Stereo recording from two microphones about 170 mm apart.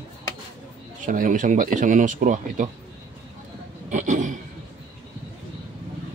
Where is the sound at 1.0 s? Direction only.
50° right (ahead or behind).